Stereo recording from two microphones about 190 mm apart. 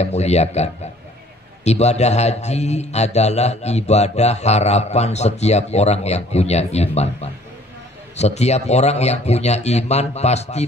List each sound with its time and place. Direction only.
0.0 s a man's voice: 35° left (ahead or behind)